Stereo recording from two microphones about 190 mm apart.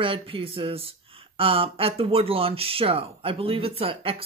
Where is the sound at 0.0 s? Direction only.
30° right (ahead or behind).